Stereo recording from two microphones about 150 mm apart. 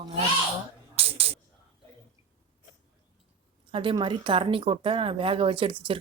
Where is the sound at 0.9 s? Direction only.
40° right (ahead or behind).